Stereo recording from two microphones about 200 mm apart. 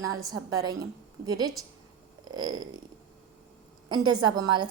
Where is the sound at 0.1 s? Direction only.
20° right (ahead or behind).